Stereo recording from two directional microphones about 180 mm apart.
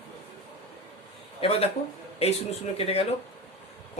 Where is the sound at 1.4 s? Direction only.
35° left (ahead or behind).